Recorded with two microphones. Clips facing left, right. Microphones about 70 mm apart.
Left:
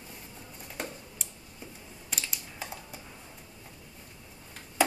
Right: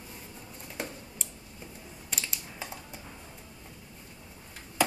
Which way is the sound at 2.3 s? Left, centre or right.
Centre.